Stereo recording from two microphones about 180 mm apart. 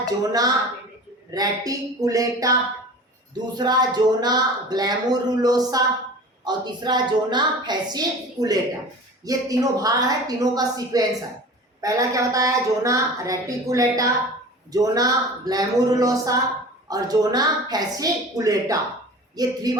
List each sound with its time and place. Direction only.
0.0 s speech: 20° right (ahead or behind)